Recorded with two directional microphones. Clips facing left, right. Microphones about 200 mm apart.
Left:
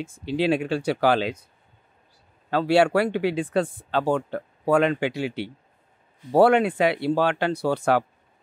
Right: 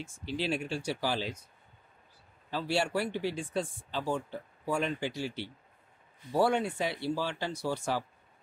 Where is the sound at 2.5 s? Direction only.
70° left (ahead or behind).